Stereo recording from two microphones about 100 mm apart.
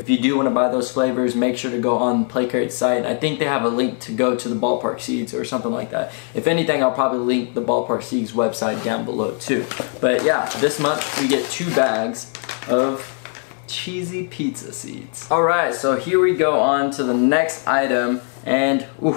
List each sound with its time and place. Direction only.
0.1 s speech: 15° left (ahead or behind)
14.4 s speech: 10° left (ahead or behind)